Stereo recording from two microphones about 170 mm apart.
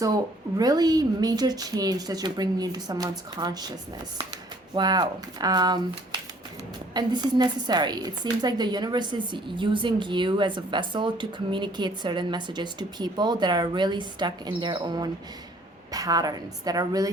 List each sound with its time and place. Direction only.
0.0 s a woman's voice: 20° right (ahead or behind)
6.9 s a woman's voice: 25° right (ahead or behind)